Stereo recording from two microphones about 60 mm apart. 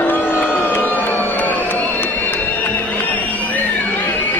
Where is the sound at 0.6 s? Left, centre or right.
Left.